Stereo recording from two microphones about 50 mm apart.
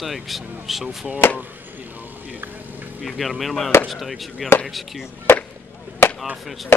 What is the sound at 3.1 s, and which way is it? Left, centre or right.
Chop, centre.